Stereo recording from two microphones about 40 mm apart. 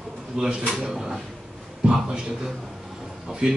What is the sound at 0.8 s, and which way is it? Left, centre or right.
Speech, centre.